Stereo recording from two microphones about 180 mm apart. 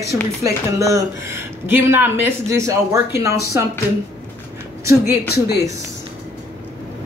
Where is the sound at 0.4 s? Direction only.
15° right (ahead or behind).